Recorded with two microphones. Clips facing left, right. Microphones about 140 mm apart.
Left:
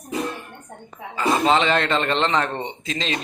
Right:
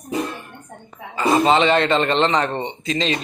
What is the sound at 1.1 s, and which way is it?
A man's voice, centre (ahead or behind).